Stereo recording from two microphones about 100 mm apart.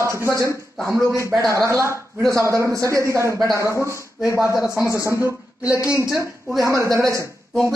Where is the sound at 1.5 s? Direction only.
30° right (ahead or behind).